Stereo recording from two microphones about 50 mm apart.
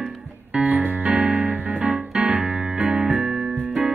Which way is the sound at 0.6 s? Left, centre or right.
Right.